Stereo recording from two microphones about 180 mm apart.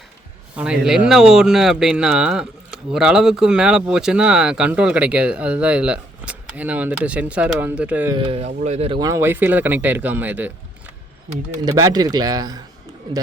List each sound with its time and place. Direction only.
0.5 s speech: 5° right (ahead or behind)
8.1 s speech: 30° right (ahead or behind)
9.0 s speech: 15° right (ahead or behind)
11.6 s speech: 20° right (ahead or behind)